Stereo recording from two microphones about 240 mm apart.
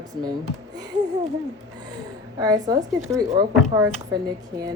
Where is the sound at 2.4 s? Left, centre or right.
Centre.